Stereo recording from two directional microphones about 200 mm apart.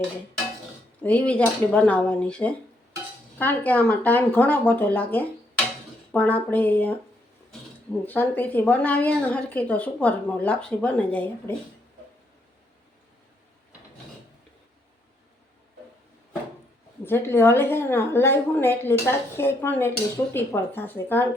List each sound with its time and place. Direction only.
1.0 s speech: 5° left (ahead or behind)
8.0 s speech: 10° left (ahead or behind)
17.0 s speech: 10° left (ahead or behind)